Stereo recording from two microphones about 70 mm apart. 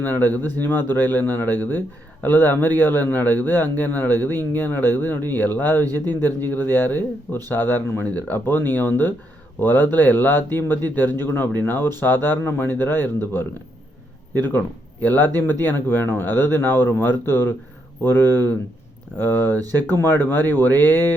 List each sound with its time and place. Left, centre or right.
0.0 s a man's voice: left